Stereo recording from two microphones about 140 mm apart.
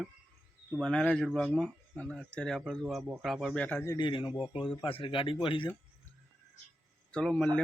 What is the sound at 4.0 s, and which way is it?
Speech, 35° left (ahead or behind).